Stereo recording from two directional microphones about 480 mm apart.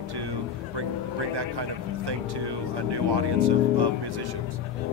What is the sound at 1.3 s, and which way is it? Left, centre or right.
Speech, right.